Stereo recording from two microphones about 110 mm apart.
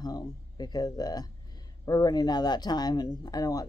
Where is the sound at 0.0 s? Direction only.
40° left (ahead or behind).